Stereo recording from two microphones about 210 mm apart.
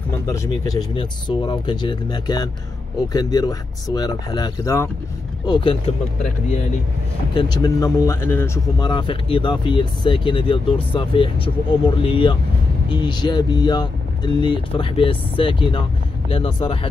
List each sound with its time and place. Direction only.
0.3 s speech: 15° left (ahead or behind)
7.3 s speech: 20° left (ahead or behind)